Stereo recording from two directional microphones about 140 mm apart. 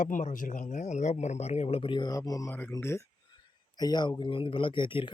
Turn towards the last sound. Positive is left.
turn(degrees=35)  # may be behind; listen again after turning